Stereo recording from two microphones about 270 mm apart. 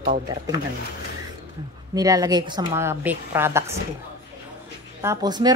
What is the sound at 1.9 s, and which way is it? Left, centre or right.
A man's voice, centre.